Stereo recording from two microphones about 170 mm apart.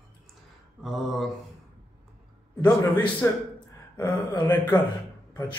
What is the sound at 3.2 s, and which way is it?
Speech, 15° left (ahead or behind).